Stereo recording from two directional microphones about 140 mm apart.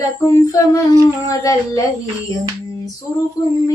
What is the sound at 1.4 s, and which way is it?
Speech, 25° left (ahead or behind).